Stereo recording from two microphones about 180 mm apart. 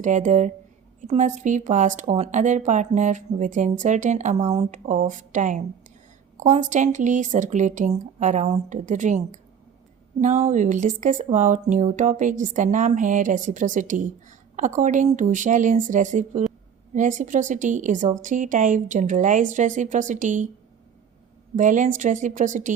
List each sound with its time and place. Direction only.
0.0 s speech: 45° right (ahead or behind)
21.5 s speech: 45° right (ahead or behind)